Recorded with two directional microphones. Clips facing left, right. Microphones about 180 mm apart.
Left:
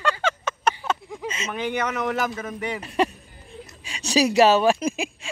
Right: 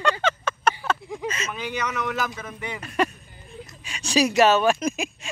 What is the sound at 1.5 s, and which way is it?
Speech, 55° left (ahead or behind).